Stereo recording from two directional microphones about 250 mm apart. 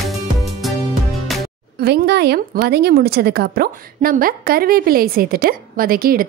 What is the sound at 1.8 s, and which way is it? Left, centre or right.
A woman's voice, right.